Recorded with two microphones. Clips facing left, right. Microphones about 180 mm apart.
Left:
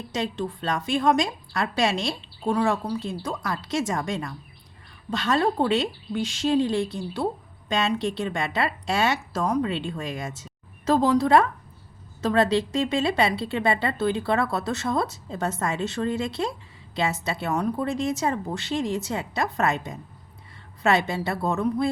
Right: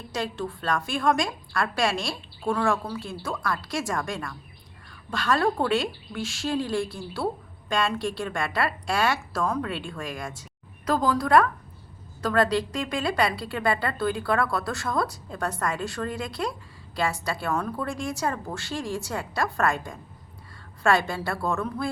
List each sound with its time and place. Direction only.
0.1 s a woman's voice: 20° left (ahead or behind)